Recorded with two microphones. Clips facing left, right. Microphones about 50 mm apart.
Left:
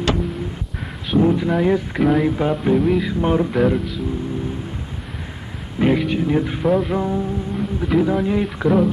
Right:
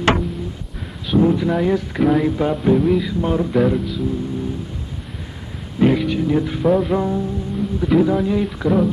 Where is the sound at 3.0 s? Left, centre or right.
Left.